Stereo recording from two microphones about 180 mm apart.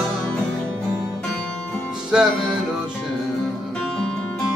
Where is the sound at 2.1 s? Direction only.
5° right (ahead or behind).